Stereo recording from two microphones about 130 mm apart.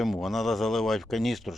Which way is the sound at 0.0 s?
Centre (ahead or behind).